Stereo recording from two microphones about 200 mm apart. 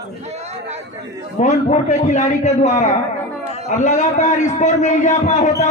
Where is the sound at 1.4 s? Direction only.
35° left (ahead or behind).